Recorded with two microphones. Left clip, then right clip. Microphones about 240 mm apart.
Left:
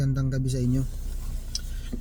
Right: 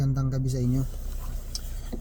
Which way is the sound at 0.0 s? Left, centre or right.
Right.